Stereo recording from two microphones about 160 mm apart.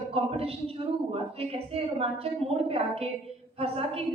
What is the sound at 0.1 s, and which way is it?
Speech, 35° right (ahead or behind).